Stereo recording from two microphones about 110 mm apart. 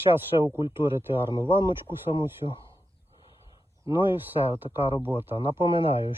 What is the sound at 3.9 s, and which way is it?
Speech, 50° left (ahead or behind).